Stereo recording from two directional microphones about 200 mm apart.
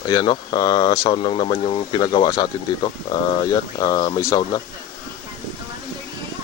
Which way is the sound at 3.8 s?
20° left (ahead or behind).